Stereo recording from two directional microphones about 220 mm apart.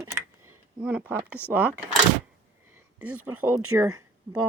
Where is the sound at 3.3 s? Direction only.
75° right (ahead or behind).